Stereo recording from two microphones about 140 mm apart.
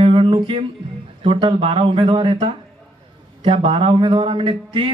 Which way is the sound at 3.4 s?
40° right (ahead or behind).